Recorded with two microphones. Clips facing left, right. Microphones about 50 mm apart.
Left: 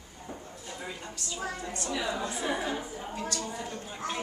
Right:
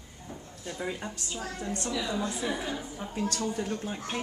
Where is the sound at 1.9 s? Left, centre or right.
Left.